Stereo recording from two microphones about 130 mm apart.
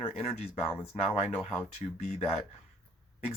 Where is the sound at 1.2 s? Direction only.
10° left (ahead or behind).